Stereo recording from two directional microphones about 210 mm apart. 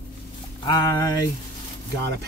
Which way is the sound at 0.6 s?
20° left (ahead or behind).